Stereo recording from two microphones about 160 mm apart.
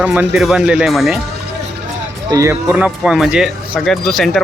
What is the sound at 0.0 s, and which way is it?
Speech, 10° right (ahead or behind).